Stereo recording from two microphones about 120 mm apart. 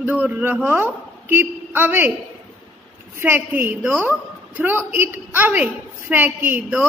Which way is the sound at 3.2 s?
15° right (ahead or behind).